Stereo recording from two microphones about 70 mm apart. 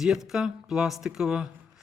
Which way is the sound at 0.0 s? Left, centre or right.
Centre.